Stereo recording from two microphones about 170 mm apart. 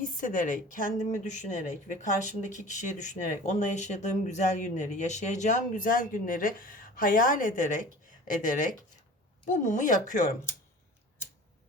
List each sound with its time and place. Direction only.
0.0 s speech: 50° left (ahead or behind)